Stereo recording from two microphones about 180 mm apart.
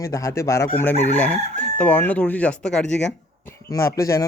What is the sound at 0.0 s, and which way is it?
A man's voice, 15° left (ahead or behind).